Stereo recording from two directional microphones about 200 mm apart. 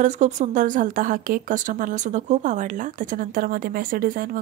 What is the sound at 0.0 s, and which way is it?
Speech, 35° right (ahead or behind).